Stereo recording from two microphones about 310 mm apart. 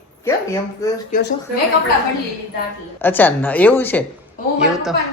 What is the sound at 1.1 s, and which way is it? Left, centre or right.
Speech, left.